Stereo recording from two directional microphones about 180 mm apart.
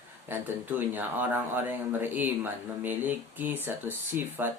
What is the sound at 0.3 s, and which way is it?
Speech, 10° right (ahead or behind).